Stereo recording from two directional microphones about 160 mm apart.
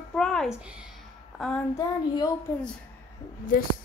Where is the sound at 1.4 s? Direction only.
5° left (ahead or behind).